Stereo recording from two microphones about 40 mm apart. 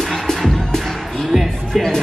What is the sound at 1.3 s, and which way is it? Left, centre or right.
Music, centre.